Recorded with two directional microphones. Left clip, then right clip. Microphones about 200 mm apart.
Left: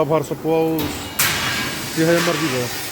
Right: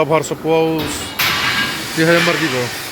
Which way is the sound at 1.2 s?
55° left (ahead or behind).